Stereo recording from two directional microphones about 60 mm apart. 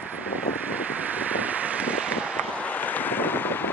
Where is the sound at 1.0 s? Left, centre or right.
Right.